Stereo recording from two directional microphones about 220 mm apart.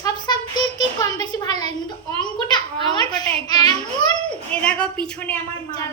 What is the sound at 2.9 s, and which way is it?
A woman's voice, 20° left (ahead or behind).